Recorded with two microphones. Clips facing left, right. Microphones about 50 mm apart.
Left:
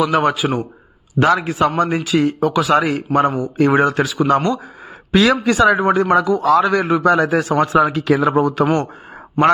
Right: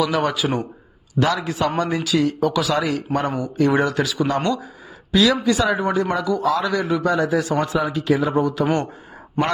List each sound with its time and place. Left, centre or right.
0.0 s a man's voice: left
5.1 s a man's voice: left
7.9 s speech: left
8.4 s a man's voice: left